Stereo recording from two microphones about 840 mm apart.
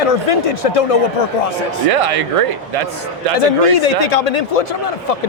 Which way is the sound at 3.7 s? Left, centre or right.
Left.